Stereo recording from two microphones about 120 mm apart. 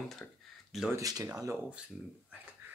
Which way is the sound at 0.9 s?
30° right (ahead or behind).